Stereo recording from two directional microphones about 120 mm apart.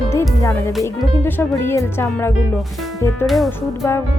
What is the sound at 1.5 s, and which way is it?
Speech, 20° left (ahead or behind).